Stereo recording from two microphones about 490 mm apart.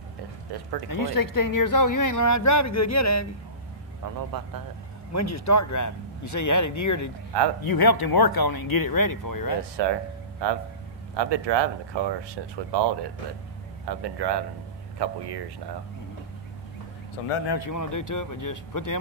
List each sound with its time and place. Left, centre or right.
0.5 s speech: right
0.8 s speech: left
4.3 s speech: right
5.1 s speech: left
7.6 s speech: left
9.8 s speech: right
17.5 s speech: left